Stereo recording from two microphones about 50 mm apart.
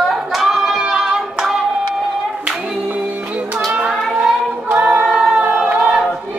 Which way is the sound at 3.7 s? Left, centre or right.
Centre.